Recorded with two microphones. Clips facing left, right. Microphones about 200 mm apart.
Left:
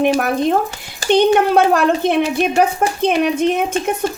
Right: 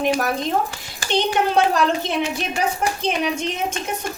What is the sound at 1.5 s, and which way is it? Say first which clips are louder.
A woman's voice: left 5 dB; 55° left (ahead or behind).